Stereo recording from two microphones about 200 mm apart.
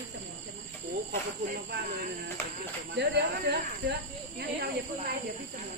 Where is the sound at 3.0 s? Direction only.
55° right (ahead or behind).